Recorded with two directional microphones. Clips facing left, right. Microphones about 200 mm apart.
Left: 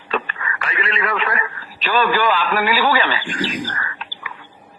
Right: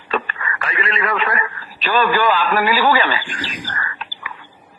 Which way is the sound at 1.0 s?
45° right (ahead or behind).